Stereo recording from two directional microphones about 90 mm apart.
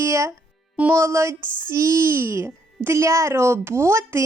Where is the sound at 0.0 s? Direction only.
35° right (ahead or behind).